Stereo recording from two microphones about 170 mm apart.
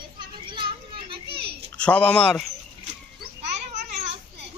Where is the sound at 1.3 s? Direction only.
70° right (ahead or behind).